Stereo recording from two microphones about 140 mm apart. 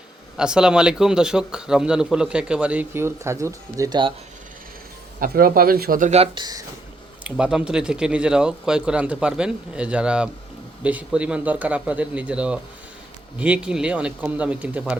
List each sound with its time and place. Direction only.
0.3 s a man's voice: 5° right (ahead or behind); by 4.1 s 30° right (ahead or behind)
5.2 s speech: 90° right
6.3 s speech: 30° right (ahead or behind)
7.3 s a man's voice: 5° right (ahead or behind)